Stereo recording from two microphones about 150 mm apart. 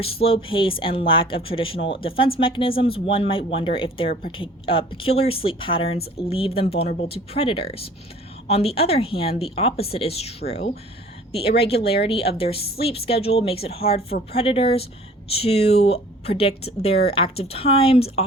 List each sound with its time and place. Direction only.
0.0 s speech: 40° left (ahead or behind)
11.8 s speech: 90° left
12.4 s speech: 40° left (ahead or behind)